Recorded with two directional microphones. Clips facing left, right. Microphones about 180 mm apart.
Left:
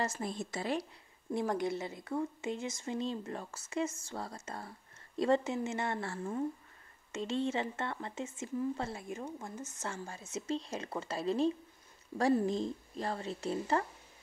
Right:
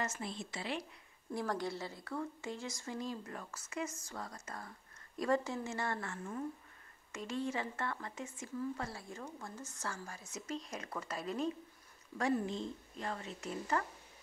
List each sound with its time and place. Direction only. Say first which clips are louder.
0.0 s a woman's voice: left 4 dB; 35° left (ahead or behind)
0.3 s a woman's voice: left 6 dB; 45° left (ahead or behind)
1.3 s a woman's voice: left 5 dB; 20° left (ahead or behind)